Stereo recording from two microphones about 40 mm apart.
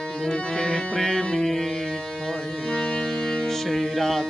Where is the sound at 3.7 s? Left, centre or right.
Centre.